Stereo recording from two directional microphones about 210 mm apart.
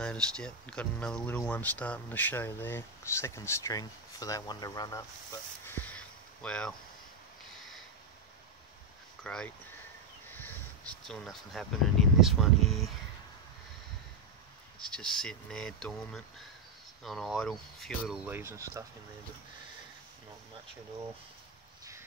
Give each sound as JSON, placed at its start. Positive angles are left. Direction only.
{"t": 0.0, "sound": "speech", "side_deg": 5}
{"t": 9.2, "sound": "speech", "side_deg": 5}
{"t": 10.3, "sound": "a sound", "side_deg": 10}
{"t": 10.9, "sound": "speech", "side_deg": 0}
{"t": 14.9, "sound": "speech", "side_deg": 5}